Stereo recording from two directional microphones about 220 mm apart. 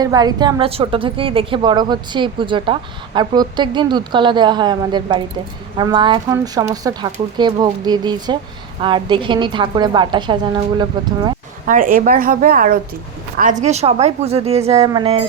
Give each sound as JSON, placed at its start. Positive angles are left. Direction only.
{"t": 0.0, "sound": "a woman's voice", "side_deg": -15}
{"t": 11.6, "sound": "a woman's voice", "side_deg": -40}